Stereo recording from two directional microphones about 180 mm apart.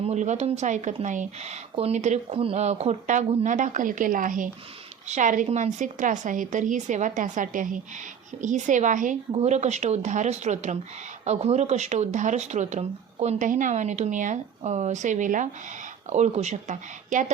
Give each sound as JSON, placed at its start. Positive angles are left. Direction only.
{"t": 0.0, "sound": "a woman's voice", "side_deg": -40}